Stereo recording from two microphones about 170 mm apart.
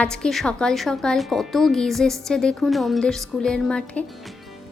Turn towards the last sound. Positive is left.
turn(degrees=5)  # may be behind; listen again after turning